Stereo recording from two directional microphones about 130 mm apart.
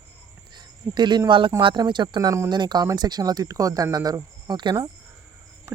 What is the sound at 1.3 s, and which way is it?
Speech, 40° right (ahead or behind).